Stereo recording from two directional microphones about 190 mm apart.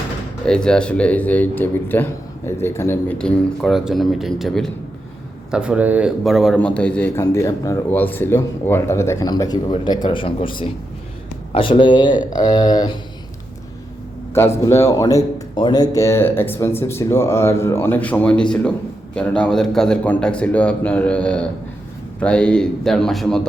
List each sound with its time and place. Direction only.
0.4 s a man's voice: 5° left (ahead or behind); by 13.0 s 20° left (ahead or behind)
14.3 s a man's voice: 15° left (ahead or behind)